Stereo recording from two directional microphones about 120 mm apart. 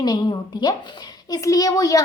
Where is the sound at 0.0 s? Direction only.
35° left (ahead or behind).